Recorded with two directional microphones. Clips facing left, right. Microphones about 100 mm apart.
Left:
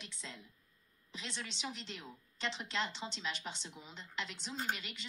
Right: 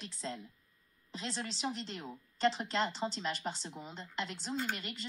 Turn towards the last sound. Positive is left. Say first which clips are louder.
# right 2 dB
turn(degrees=-45)  # may be behind; listen again after turning